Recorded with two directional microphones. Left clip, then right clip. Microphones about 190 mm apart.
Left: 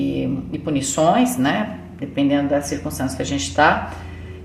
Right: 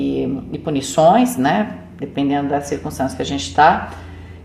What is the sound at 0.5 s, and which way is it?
A woman's voice, 40° right (ahead or behind).